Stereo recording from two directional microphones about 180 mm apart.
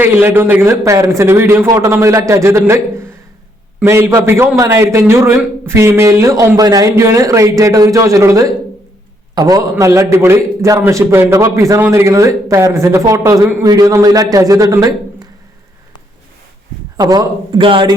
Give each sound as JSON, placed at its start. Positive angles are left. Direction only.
{"t": 0.0, "sound": "a man's voice", "side_deg": -10}
{"t": 17.0, "sound": "a man's voice", "side_deg": -20}